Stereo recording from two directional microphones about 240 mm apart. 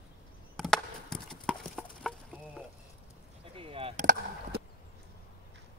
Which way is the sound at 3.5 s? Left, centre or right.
Right.